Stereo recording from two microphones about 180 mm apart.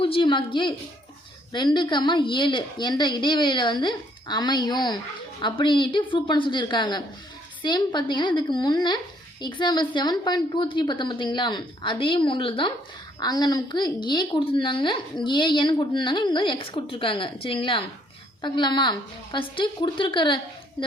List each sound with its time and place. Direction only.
0.0 s a woman's voice: 30° left (ahead or behind)